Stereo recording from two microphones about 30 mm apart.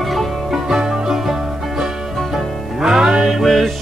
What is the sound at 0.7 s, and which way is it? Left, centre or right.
Music, centre.